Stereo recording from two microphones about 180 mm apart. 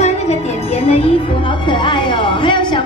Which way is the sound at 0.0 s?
35° left (ahead or behind).